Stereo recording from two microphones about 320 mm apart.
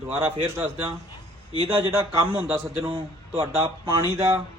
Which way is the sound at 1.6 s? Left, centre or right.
Centre.